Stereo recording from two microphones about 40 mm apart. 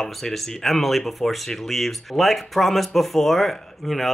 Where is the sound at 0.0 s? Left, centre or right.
Centre.